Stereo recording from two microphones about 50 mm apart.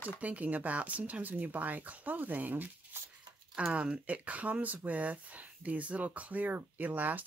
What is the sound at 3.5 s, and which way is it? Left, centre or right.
Speech, right.